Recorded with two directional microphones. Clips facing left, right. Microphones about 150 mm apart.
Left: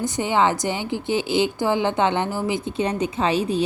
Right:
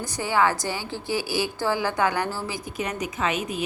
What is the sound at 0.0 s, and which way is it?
A woman's voice, 20° left (ahead or behind).